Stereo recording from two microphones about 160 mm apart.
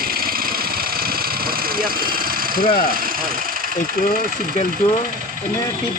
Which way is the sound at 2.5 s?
70° left (ahead or behind).